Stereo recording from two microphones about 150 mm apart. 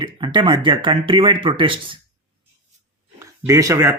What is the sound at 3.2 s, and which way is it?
Speech, 20° right (ahead or behind).